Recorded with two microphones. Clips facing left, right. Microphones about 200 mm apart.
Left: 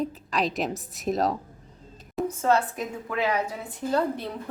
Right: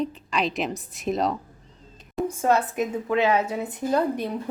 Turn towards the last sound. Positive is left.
turn(degrees=-15)  # may be behind; listen again after turning